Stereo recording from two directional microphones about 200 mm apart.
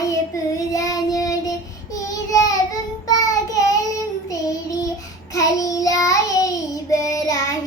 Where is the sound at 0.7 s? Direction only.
15° left (ahead or behind).